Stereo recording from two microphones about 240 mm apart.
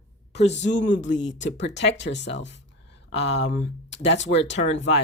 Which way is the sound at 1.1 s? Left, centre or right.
Left.